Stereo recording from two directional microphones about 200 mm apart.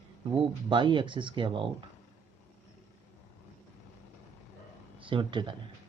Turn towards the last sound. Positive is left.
turn(degrees=-25)  # may be behind; listen again after turning